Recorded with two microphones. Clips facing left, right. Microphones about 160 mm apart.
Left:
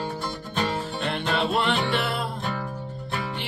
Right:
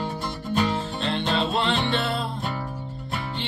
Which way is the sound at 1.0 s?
25° right (ahead or behind).